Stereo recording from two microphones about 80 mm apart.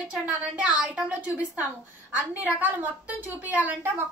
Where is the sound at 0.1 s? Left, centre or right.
Centre.